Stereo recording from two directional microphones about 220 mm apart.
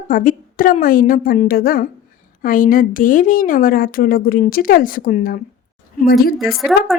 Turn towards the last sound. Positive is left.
turn(degrees=0)  # may be behind; listen again after turning